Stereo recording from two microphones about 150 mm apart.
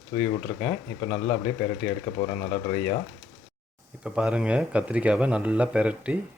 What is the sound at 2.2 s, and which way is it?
Speech, 25° left (ahead or behind).